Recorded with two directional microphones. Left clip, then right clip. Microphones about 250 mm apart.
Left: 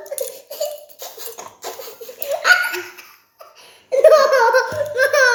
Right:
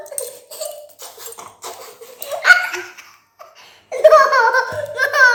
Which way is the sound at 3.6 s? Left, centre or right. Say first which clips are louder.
Even; centre.